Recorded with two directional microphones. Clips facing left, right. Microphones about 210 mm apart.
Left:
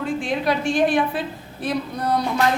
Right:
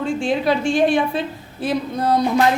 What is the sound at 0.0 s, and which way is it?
A woman's voice, 30° right (ahead or behind).